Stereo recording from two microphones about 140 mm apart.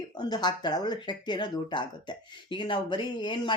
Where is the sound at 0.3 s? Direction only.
30° left (ahead or behind).